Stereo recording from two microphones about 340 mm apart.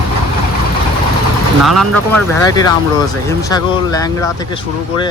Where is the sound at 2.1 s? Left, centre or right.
Centre.